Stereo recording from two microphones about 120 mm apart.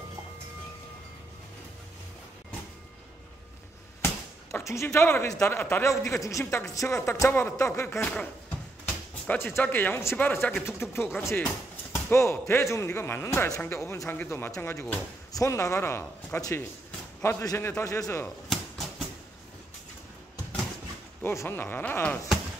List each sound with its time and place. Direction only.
4.6 s a man's voice: 20° left (ahead or behind)
8.0 s speech: 10° left (ahead or behind)
9.3 s a man's voice: 15° left (ahead or behind)
18.2 s a sound: centre (ahead or behind)
21.2 s speech: 20° left (ahead or behind)